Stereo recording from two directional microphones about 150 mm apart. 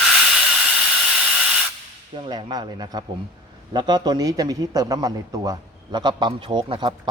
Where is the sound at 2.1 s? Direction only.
30° right (ahead or behind).